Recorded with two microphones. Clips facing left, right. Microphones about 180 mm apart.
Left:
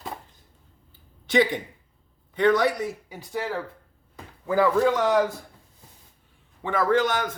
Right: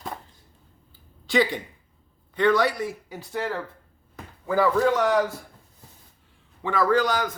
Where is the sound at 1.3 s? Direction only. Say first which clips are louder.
Left 1 dB; 20° left (ahead or behind).